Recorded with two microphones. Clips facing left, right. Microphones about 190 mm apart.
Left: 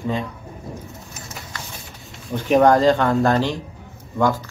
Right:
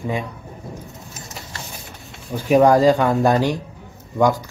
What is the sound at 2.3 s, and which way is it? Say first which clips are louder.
Speech: right 1 dB; 5° right (ahead or behind).